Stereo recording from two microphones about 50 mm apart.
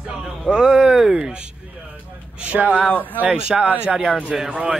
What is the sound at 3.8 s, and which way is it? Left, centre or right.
Speech, centre.